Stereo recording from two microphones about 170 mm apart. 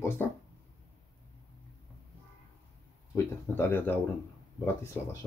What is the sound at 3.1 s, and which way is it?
Speech, 10° left (ahead or behind).